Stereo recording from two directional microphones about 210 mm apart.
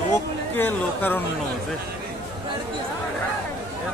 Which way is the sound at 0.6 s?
10° left (ahead or behind).